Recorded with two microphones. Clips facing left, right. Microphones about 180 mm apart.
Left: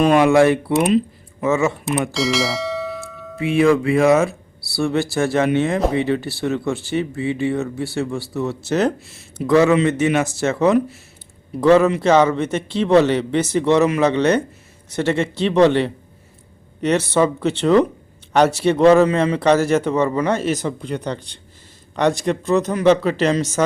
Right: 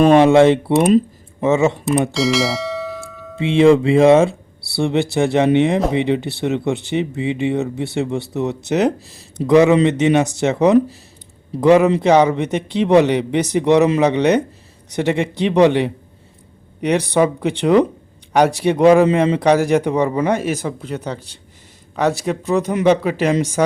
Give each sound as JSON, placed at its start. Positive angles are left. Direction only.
{"t": 0.1, "sound": "speech", "side_deg": -25}
{"t": 2.1, "sound": "bell", "side_deg": 0}
{"t": 3.3, "sound": "speech", "side_deg": -25}
{"t": 9.0, "sound": "speech", "side_deg": -35}
{"t": 9.5, "sound": "speech", "side_deg": -20}